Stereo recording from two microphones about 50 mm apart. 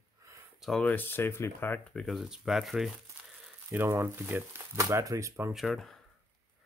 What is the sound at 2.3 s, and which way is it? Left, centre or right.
Speech, centre.